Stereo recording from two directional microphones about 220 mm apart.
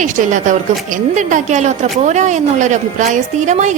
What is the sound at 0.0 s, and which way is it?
A woman's voice, 35° right (ahead or behind).